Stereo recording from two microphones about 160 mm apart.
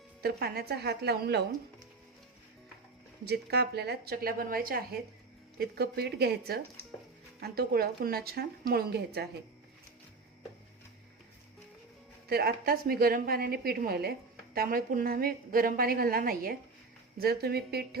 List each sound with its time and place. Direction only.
0.2 s a woman's voice: 80° right
3.2 s a woman's voice: 90° right; by 4.8 s 65° right (ahead or behind)
5.5 s a woman's voice: 80° right
7.4 s a woman's voice: 75° right (ahead or behind)
12.3 s a woman's voice: 75° right (ahead or behind)
17.2 s a woman's voice: 80° right